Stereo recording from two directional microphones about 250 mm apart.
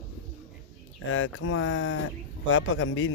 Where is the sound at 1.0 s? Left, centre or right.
Left.